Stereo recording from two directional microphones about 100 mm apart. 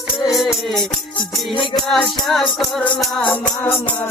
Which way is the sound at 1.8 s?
5° left (ahead or behind).